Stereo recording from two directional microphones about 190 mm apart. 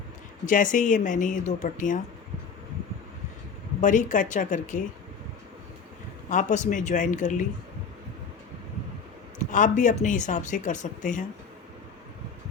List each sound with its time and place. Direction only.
0.4 s speech: 45° left (ahead or behind)
3.8 s speech: 40° left (ahead or behind)
6.2 s speech: 40° left (ahead or behind)
9.4 s speech: 40° left (ahead or behind)